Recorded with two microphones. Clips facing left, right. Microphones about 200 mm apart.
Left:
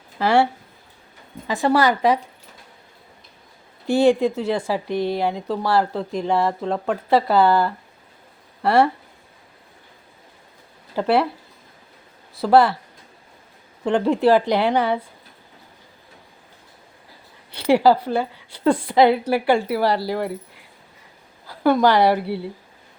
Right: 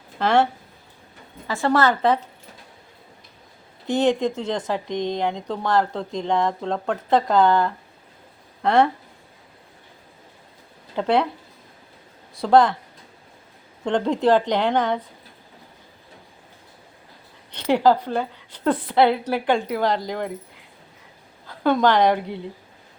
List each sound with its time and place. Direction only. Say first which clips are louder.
0.2 s speech: left 1 dB; 10° left (ahead or behind)
1.5 s speech: left 2 dB; 15° left (ahead or behind)
3.8 s speech: left 4 dB; 10° left (ahead or behind)
10.9 s speech: left 1 dB; 5° left (ahead or behind)
12.4 s speech: left 1 dB; 5° left (ahead or behind)
13.8 s speech: left 2 dB; 5° left (ahead or behind)
17.5 s speech: left 2 dB; 10° left (ahead or behind)
21.4 s a woman's voice: left 2 dB; 5° left (ahead or behind)